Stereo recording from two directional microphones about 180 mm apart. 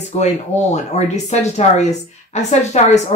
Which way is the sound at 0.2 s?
40° left (ahead or behind).